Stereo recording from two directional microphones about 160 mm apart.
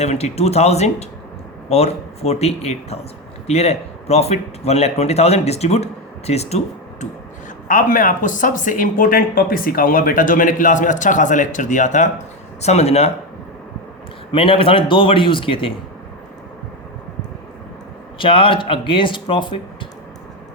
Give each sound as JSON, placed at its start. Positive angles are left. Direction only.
{"t": 0.0, "sound": "speech", "side_deg": 45}
{"t": 7.7, "sound": "speech", "side_deg": 55}
{"t": 14.3, "sound": "speech", "side_deg": 35}
{"t": 18.2, "sound": "speech", "side_deg": 35}